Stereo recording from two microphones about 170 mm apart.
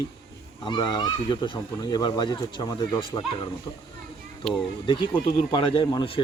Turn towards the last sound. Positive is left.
turn(degrees=30)  # may be behind; listen again after turning